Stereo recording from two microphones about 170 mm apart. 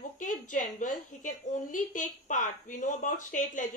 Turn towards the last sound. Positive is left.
turn(degrees=50)  # may be behind; listen again after turning